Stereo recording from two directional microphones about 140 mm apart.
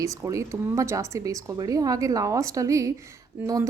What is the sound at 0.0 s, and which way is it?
A woman's voice, 20° right (ahead or behind).